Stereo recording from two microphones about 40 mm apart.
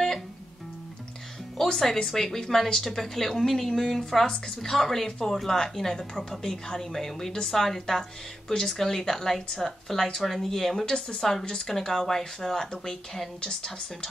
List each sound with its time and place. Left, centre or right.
1.7 s a woman's voice: centre
10.9 s a woman's voice: centre